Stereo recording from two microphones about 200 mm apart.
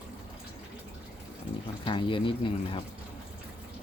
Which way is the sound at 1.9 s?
25° left (ahead or behind).